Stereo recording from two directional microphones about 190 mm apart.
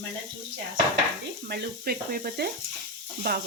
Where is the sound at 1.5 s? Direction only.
55° right (ahead or behind).